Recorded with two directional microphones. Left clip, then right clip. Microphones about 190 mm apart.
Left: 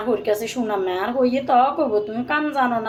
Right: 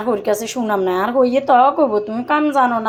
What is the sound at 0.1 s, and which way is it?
A woman's voice, 25° right (ahead or behind).